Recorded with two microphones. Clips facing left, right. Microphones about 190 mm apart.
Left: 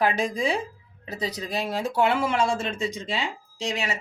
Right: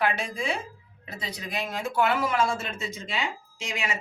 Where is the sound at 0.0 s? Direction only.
35° left (ahead or behind).